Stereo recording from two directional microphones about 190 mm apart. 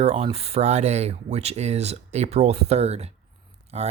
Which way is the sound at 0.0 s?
30° right (ahead or behind).